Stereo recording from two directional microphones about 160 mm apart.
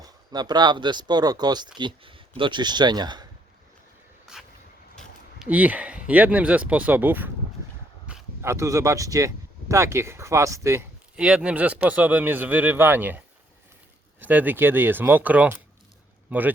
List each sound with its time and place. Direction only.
0.0 s speech: 25° right (ahead or behind)
4.3 s a sound: 5° right (ahead or behind)
5.5 s speech: 10° right (ahead or behind)
8.4 s speech: 20° right (ahead or behind)
11.2 s speech: 5° right (ahead or behind)